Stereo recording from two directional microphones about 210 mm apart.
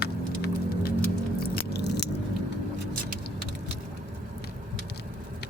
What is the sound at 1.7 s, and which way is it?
Biting, 50° left (ahead or behind).